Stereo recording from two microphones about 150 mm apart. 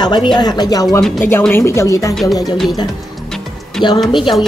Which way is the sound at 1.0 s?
5° left (ahead or behind).